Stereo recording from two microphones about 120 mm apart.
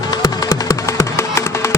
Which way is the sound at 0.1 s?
30° left (ahead or behind).